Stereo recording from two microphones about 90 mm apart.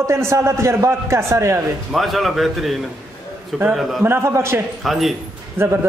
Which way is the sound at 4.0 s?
30° right (ahead or behind).